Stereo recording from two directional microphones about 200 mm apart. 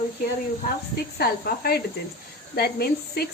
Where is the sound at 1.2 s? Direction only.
50° left (ahead or behind).